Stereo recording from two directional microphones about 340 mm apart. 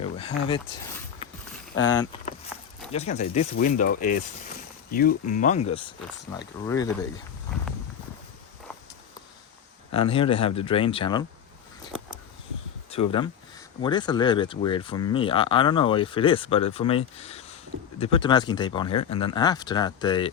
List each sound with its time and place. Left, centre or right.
0.0 s speech: centre
1.7 s speech: left
2.9 s speech: centre
9.9 s speech: centre
13.1 s speech: centre